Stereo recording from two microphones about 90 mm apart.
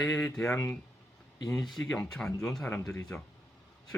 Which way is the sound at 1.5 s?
Centre (ahead or behind).